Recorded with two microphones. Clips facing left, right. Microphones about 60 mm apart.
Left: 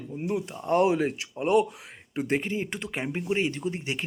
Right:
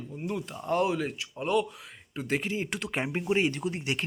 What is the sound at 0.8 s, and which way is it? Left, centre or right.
Speech, left.